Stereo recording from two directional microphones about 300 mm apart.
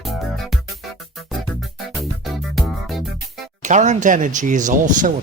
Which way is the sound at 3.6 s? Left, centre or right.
Right.